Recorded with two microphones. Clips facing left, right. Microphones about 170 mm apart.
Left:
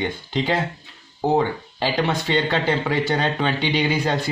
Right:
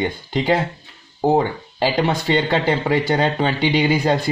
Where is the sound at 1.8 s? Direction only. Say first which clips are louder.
Right 3 dB; 10° right (ahead or behind).